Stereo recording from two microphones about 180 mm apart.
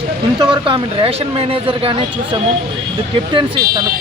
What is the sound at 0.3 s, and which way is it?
Speech, 25° right (ahead or behind).